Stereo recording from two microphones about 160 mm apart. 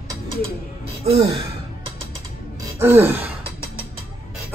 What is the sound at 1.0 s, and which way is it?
Gasp, 35° right (ahead or behind).